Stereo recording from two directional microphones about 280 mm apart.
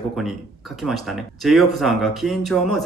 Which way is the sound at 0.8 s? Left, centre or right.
Centre.